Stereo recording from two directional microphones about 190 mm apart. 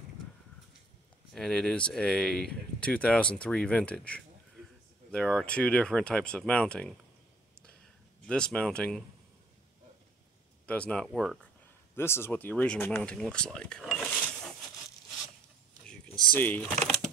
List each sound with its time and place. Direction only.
1.3 s speech: 5° left (ahead or behind)
8.3 s speech: 5° left (ahead or behind)
10.7 s speech: 5° left (ahead or behind)
11.9 s speech: 10° left (ahead or behind)
16.3 s speech: 10° left (ahead or behind)